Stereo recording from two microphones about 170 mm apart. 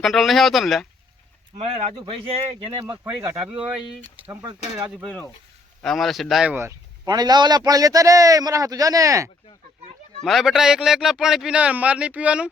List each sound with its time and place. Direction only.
0.0 s a man's voice: centre (ahead or behind)
2.0 s speech: 30° right (ahead or behind)
2.9 s a man's voice: 10° right (ahead or behind)
5.8 s speech: centre (ahead or behind); by 9.3 s 20° right (ahead or behind)
10.2 s a man's voice: centre (ahead or behind)